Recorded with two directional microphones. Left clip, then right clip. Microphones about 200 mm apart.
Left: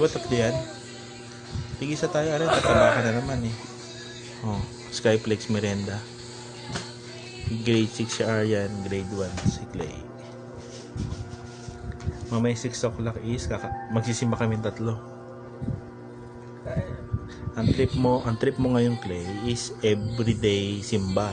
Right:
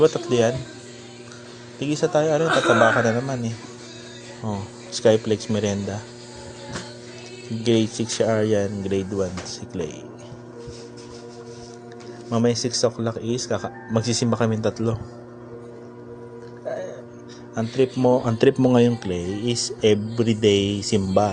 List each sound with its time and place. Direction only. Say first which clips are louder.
0.0 s speech: right 5 dB; 25° right (ahead or behind)
1.8 s speech: right 5 dB; 25° right (ahead or behind)
4.4 s speech: right 3 dB; 10° right (ahead or behind)
7.6 s speech: right 4 dB; 10° right (ahead or behind)
8.8 s speech: right 6 dB; 30° right (ahead or behind)
12.3 s speech: right 6 dB; 25° right (ahead or behind)
17.5 s speech: right 4 dB; 20° right (ahead or behind)